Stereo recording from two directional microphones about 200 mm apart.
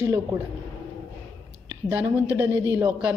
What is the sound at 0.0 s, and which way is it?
Speech, 15° right (ahead or behind).